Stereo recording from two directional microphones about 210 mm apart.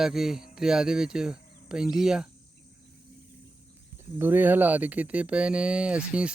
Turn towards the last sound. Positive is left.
turn(degrees=-5)  # may be behind; listen again after turning